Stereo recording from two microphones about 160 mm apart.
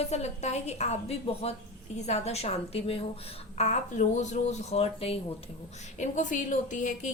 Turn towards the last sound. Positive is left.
turn(degrees=50)  # may be behind; listen again after turning